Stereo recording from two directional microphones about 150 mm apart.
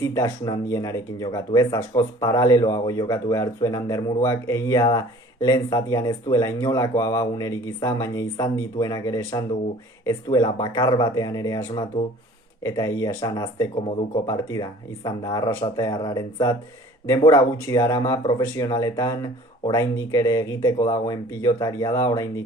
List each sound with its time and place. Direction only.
0.0 s speech: 25° left (ahead or behind)